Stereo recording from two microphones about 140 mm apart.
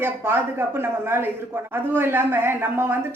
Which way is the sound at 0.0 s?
15° right (ahead or behind).